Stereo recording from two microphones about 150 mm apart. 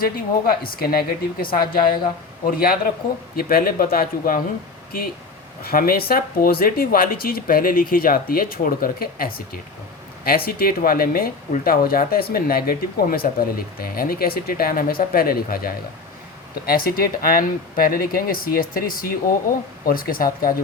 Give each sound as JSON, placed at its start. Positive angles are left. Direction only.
{"t": 0.6, "sound": "speech", "side_deg": 75}
{"t": 5.6, "sound": "speech", "side_deg": 75}